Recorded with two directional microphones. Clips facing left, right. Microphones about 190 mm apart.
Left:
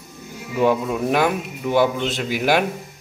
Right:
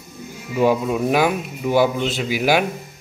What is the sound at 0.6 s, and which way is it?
A man's voice, 5° right (ahead or behind).